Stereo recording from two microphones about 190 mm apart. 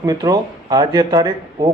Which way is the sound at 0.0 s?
20° right (ahead or behind).